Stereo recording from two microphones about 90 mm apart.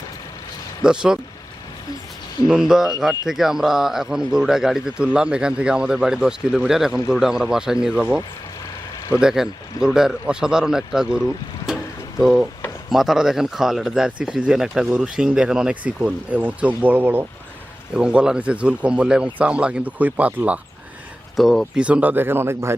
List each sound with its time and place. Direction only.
0.9 s speech: 10° right (ahead or behind)
2.5 s speech: 5° right (ahead or behind)
9.2 s speech: 5° right (ahead or behind)
11.7 s a sound: 5° right (ahead or behind)
12.2 s speech: 10° right (ahead or behind)
17.9 s speech: 10° right (ahead or behind)
21.3 s speech: 5° left (ahead or behind)
21.8 s speech: 15° right (ahead or behind)